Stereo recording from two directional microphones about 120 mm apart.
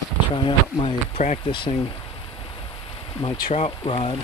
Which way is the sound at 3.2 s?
50° left (ahead or behind).